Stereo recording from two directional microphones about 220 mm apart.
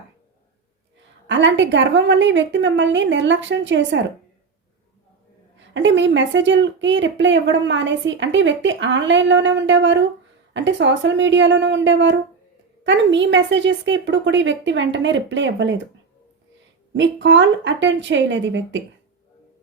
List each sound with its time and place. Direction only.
1.3 s speech: 55° right (ahead or behind)
5.5 s speech: 55° right (ahead or behind)
16.9 s speech: 55° right (ahead or behind)